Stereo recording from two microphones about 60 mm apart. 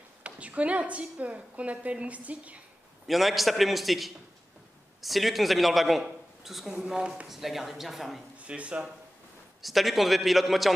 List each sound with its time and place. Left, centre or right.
0.2 s a woman's voice: right
3.1 s a man's voice: centre
8.4 s speech: right
9.6 s a man's voice: centre